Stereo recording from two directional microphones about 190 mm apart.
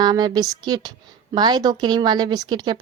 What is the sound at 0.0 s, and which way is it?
A woman's voice, 20° right (ahead or behind).